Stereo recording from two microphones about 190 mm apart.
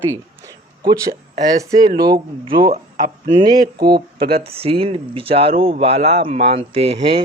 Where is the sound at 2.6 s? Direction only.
50° right (ahead or behind).